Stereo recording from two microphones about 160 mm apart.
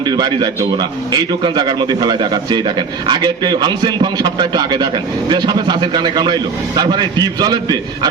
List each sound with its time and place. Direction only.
0.0 s a man's voice: 25° right (ahead or behind)